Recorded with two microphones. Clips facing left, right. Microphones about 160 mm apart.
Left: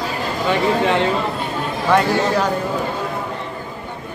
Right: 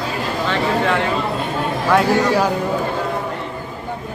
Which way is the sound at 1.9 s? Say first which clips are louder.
Right 2 dB; 5° right (ahead or behind).